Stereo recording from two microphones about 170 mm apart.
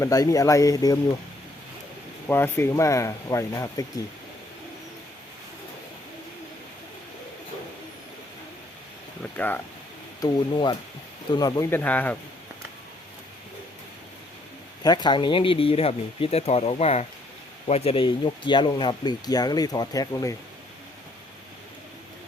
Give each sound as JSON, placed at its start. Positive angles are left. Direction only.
{"t": 0.0, "sound": "speech", "side_deg": 20}
{"t": 2.2, "sound": "speech", "side_deg": 15}
{"t": 9.2, "sound": "speech", "side_deg": 10}
{"t": 10.2, "sound": "speech", "side_deg": 25}
{"t": 11.7, "sound": "speech", "side_deg": 10}
{"t": 14.8, "sound": "speech", "side_deg": 25}